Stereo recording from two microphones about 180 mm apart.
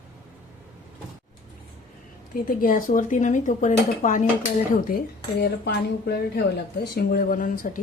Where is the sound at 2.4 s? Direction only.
50° left (ahead or behind).